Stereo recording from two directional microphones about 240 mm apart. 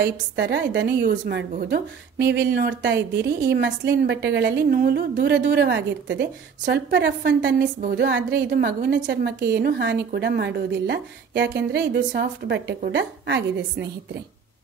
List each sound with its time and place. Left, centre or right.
0.0 s a woman's voice: right